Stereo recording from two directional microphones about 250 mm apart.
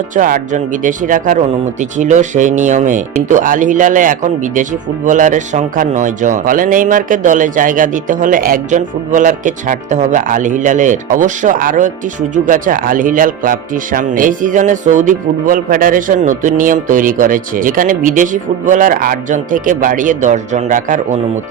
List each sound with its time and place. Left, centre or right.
0.2 s speech: right